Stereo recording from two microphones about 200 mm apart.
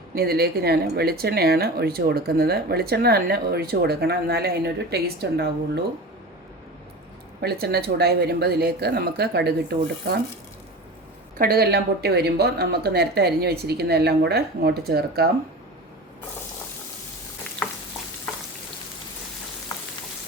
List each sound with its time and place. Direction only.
0.1 s speech: 50° right (ahead or behind)
7.4 s speech: 50° right (ahead or behind)
11.3 s speech: 50° right (ahead or behind)